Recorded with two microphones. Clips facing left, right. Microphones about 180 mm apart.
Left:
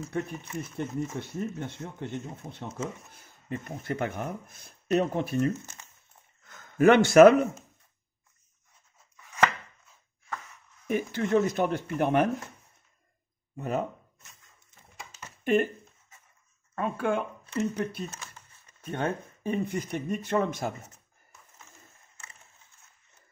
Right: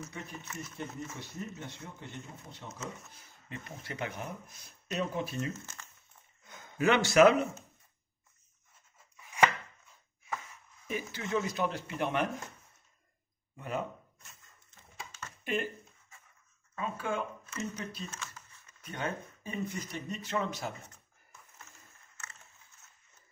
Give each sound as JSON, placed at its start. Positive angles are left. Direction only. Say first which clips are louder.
{"t": 0.1, "sound": "speech", "louder": "left 11 dB", "side_deg": 50}
{"t": 5.5, "sound": "speech", "louder": "left 7 dB", "side_deg": 15}
{"t": 6.4, "sound": "a sound", "louder": "right 1 dB", "side_deg": -20}
{"t": 6.8, "sound": "speech", "louder": "left 7 dB", "side_deg": 50}
{"t": 9.1, "sound": "chopping", "louder": "left 1 dB", "side_deg": -10}
{"t": 10.9, "sound": "speech", "louder": "left 8 dB", "side_deg": 55}
{"t": 13.6, "sound": "speech", "louder": "left 6 dB", "side_deg": 45}
{"t": 15.4, "sound": "speech", "louder": "left 10 dB", "side_deg": 50}
{"t": 16.7, "sound": "speech", "louder": "left 7 dB", "side_deg": 60}
{"t": 18.2, "sound": "a sound", "louder": "right 1 dB", "side_deg": 35}
{"t": 18.9, "sound": "speech", "louder": "left 6 dB", "side_deg": 55}